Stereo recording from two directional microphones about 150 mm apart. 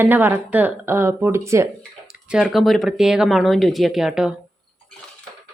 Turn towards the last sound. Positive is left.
turn(degrees=-5)  # may be behind; listen again after turning